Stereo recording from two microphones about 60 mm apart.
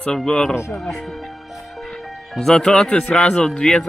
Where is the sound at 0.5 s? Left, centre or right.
Left.